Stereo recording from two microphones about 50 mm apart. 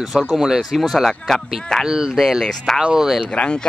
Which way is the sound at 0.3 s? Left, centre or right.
Centre.